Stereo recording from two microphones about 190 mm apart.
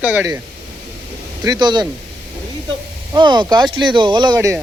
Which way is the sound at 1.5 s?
25° right (ahead or behind).